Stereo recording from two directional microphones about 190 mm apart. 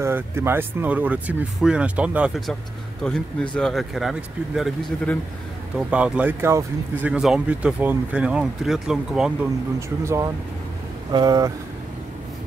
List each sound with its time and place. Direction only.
0.0 s speech: 15° right (ahead or behind)
9.8 s speech: 15° right (ahead or behind)